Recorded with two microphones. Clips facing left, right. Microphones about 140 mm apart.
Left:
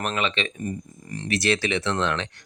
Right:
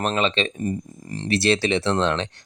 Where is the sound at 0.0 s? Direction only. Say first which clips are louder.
Right 4 dB; 30° right (ahead or behind).